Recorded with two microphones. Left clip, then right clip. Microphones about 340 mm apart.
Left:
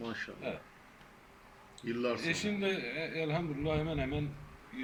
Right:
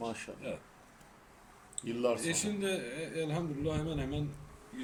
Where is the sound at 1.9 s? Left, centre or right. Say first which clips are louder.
Right 2 dB; centre.